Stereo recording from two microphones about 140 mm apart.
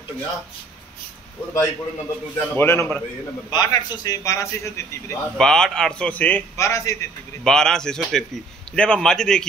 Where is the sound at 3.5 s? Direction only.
30° left (ahead or behind).